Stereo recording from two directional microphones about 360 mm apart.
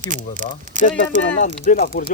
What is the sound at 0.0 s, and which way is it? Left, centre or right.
Speech, right.